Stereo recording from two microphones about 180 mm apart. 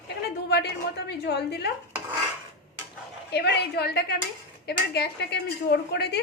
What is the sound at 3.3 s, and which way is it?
A woman's voice, 65° left (ahead or behind).